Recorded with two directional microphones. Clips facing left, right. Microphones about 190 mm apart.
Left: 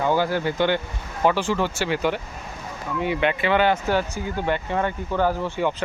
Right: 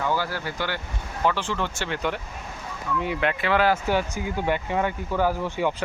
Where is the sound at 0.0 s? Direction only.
20° left (ahead or behind); by 3.8 s centre (ahead or behind).